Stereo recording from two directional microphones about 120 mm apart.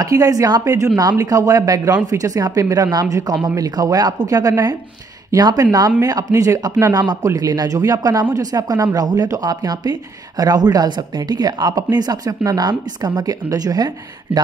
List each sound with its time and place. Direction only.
0.0 s speech: 30° right (ahead or behind)